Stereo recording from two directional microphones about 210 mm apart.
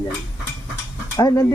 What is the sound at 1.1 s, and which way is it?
Speech, 15° left (ahead or behind).